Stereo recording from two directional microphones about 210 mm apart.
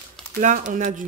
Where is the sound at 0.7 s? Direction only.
40° right (ahead or behind).